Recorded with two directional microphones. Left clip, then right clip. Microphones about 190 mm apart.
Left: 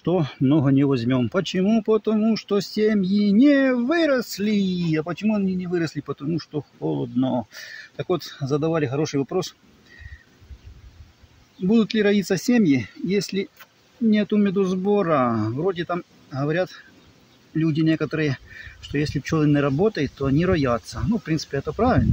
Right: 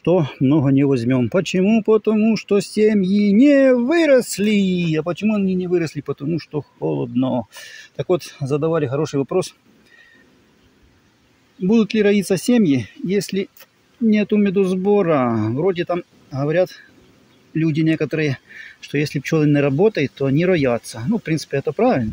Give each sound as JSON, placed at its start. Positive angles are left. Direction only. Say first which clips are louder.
{"t": 0.0, "sound": "speech", "louder": "right 6 dB", "side_deg": -25}
{"t": 0.4, "sound": "speech", "louder": "right 3 dB", "side_deg": -15}
{"t": 11.6, "sound": "speech", "louder": "right 4 dB", "side_deg": -25}